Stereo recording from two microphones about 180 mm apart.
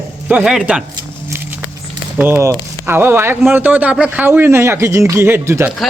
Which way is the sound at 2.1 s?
10° right (ahead or behind).